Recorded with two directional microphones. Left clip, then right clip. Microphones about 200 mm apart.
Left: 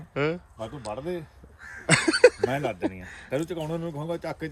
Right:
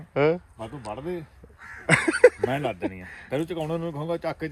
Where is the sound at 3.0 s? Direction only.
20° left (ahead or behind).